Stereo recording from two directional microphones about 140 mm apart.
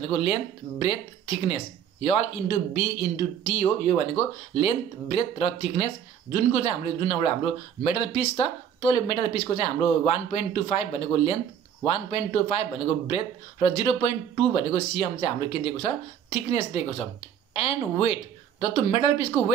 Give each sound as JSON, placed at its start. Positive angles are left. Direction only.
{"t": 0.0, "sound": "speech", "side_deg": 45}
{"t": 2.0, "sound": "speech", "side_deg": 45}